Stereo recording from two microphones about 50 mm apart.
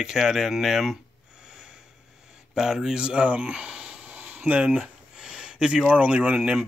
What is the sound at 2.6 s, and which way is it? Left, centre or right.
Speech, centre.